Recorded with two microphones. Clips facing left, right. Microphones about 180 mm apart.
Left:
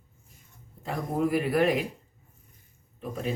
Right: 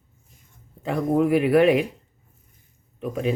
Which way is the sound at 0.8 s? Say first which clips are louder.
Right 7 dB; 70° right (ahead or behind).